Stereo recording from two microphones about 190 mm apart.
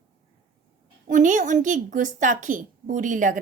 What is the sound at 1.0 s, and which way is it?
A woman's voice, 40° right (ahead or behind).